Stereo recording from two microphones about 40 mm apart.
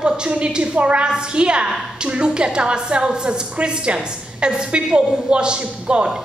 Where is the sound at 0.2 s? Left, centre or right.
Right.